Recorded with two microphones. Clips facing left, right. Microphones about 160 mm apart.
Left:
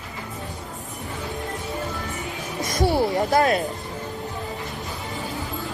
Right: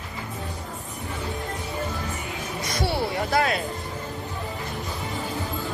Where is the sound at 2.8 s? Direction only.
40° left (ahead or behind).